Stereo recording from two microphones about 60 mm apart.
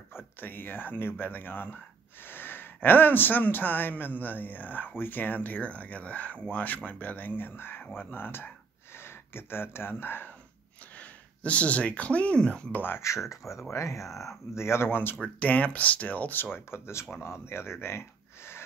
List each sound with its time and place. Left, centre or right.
0.4 s speech: left
11.0 s speech: left
12.7 s speech: left
13.5 s speech: left
15.2 s speech: left